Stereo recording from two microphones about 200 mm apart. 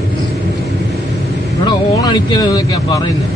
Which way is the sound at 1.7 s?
20° left (ahead or behind).